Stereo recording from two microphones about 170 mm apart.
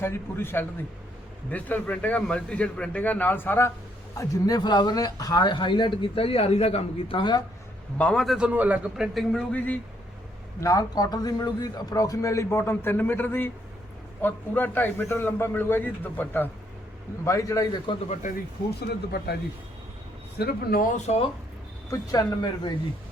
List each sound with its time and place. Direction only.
0.0 s a man's voice: 15° left (ahead or behind)
4.2 s speech: 20° left (ahead or behind)
7.9 s a man's voice: 5° left (ahead or behind)
10.6 s a man's voice: 20° left (ahead or behind)
18.8 s speech: 70° left (ahead or behind)
20.4 s speech: 60° left (ahead or behind)
20.9 s speech: 40° left (ahead or behind)
21.8 s speech: 20° left (ahead or behind)